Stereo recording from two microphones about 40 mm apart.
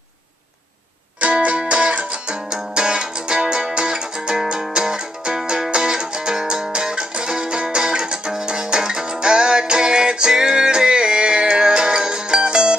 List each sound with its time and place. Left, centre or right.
1.2 s music: right